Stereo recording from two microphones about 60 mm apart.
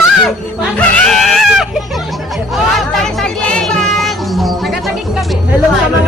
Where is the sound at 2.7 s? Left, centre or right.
Centre.